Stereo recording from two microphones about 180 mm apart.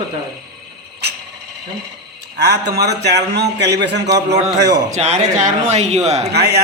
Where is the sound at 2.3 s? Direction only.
65° right (ahead or behind).